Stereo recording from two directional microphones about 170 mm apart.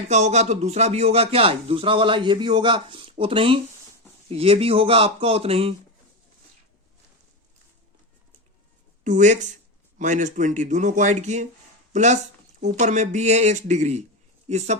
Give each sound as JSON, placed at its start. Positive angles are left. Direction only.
{"t": 0.1, "sound": "speech", "side_deg": -40}
{"t": 9.0, "sound": "speech", "side_deg": -45}